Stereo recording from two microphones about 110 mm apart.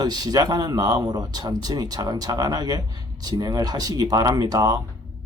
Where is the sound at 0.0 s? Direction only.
35° right (ahead or behind).